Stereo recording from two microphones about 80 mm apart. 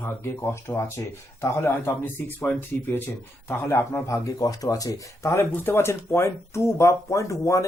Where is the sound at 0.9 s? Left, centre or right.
Left.